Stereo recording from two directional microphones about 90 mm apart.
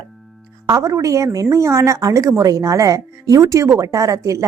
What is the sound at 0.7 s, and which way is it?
A woman's voice, 40° right (ahead or behind).